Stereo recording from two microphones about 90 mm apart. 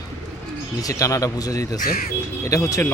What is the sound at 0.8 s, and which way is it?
Speech, 40° left (ahead or behind).